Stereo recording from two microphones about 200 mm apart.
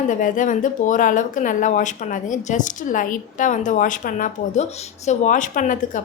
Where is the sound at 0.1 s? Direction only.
40° left (ahead or behind).